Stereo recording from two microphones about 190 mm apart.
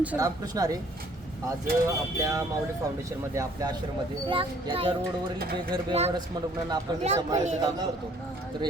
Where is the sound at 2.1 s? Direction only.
15° right (ahead or behind).